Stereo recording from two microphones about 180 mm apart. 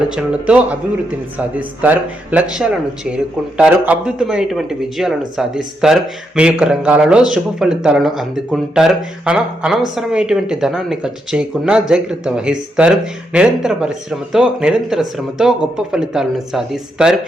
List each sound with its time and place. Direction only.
0.1 s speech: 5° right (ahead or behind)